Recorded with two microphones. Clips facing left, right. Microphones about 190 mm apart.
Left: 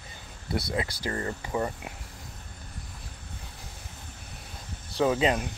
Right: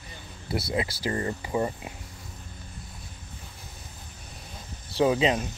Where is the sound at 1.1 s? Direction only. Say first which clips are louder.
Right 3 dB; 20° right (ahead or behind).